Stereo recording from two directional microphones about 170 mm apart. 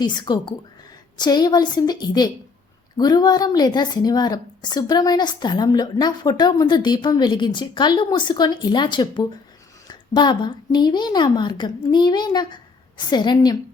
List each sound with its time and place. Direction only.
0.0 s a woman's voice: 25° left (ahead or behind)